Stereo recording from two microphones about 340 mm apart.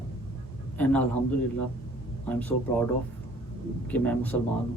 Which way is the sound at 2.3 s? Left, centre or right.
Centre.